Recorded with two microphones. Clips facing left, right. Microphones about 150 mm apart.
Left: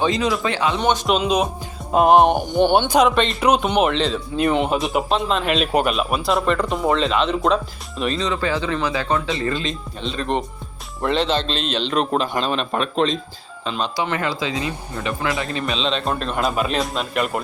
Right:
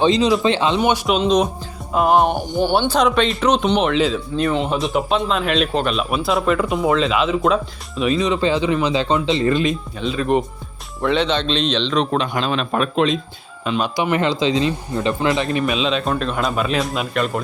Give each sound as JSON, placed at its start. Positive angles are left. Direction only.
{"t": 0.0, "sound": "speech", "side_deg": -25}
{"t": 0.8, "sound": "speech", "side_deg": -10}
{"t": 1.2, "sound": "speech", "side_deg": 10}
{"t": 1.9, "sound": "music", "side_deg": 25}
{"t": 2.5, "sound": "speech", "side_deg": 20}
{"t": 3.0, "sound": "speech", "side_deg": 5}
{"t": 4.4, "sound": "speech", "side_deg": 15}
{"t": 4.8, "sound": "speech", "side_deg": 0}
{"t": 8.2, "sound": "speech", "side_deg": -20}
{"t": 10.0, "sound": "speech", "side_deg": -5}
{"t": 15.6, "sound": "speech", "side_deg": -5}